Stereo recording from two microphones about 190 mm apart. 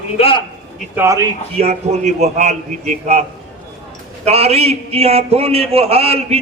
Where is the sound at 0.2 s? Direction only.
30° left (ahead or behind).